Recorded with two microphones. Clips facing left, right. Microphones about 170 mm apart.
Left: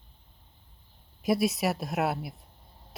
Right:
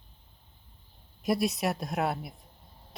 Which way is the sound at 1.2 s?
Centre (ahead or behind).